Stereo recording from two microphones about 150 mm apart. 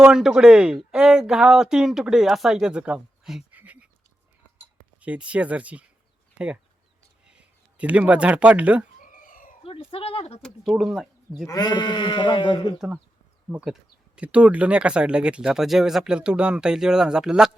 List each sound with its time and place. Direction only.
0.0 s speech: 5° right (ahead or behind)
4.9 s speech: 10° right (ahead or behind)
7.3 s speech: 10° right (ahead or behind)
9.0 s chicken: 65° left (ahead or behind)
9.6 s speech: 40° left (ahead or behind)
10.4 s speech: centre (ahead or behind)
11.4 s speech: 25° left (ahead or behind)
13.5 s speech: 10° right (ahead or behind)